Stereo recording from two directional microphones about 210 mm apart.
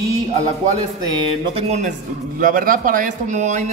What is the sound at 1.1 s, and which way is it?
Speech, 30° right (ahead or behind).